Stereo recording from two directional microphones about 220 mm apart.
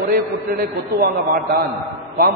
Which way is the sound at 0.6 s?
45° right (ahead or behind).